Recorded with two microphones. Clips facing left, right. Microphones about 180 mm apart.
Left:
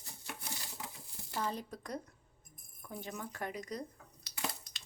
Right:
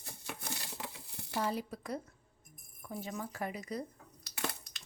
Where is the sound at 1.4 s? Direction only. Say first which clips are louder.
Right 3 dB; 10° right (ahead or behind).